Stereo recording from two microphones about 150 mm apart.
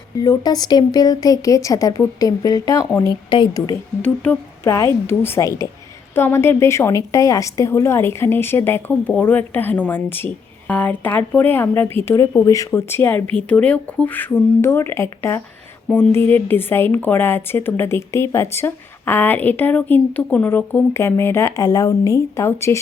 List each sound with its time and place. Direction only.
0.2 s a woman's voice: 25° left (ahead or behind)